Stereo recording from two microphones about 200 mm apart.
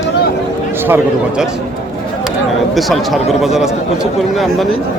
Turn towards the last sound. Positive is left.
turn(degrees=0)  # may be behind; listen again after turning